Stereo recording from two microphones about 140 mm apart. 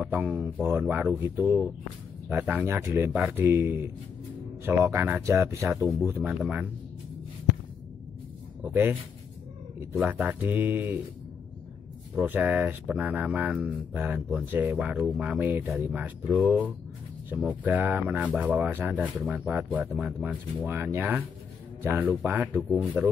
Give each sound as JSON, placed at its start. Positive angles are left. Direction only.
{"t": 0.0, "sound": "speech", "side_deg": -10}
{"t": 8.6, "sound": "speech", "side_deg": -15}
{"t": 9.9, "sound": "speech", "side_deg": -10}
{"t": 12.2, "sound": "speech", "side_deg": -15}